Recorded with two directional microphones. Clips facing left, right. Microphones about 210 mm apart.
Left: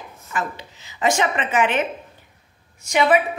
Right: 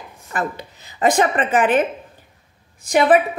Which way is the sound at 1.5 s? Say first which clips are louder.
Right 3 dB; 55° right (ahead or behind).